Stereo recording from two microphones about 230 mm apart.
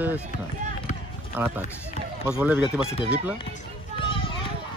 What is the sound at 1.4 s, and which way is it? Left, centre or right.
Speech, centre.